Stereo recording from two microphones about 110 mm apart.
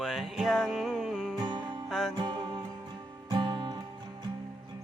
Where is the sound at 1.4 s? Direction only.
45° right (ahead or behind).